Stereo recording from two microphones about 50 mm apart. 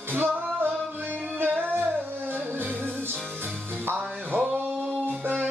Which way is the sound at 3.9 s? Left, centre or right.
Right.